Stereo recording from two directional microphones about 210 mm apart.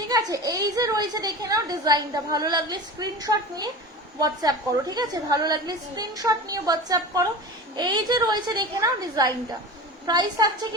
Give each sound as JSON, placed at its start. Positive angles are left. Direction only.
{"t": 0.1, "sound": "a child's voice", "side_deg": -15}